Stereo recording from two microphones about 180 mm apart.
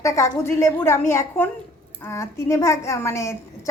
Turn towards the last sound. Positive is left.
turn(degrees=15)  # may be behind; listen again after turning